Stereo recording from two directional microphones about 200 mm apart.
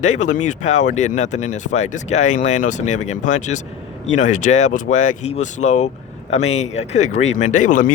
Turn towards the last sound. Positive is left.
turn(degrees=40)  # may be behind; listen again after turning